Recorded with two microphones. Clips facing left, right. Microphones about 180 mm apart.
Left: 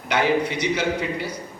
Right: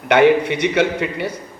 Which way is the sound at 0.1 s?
60° right (ahead or behind).